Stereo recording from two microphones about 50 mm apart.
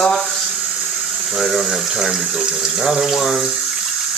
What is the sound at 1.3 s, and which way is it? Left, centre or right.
Speech, centre.